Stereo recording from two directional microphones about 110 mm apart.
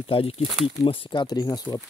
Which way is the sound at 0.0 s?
60° left (ahead or behind).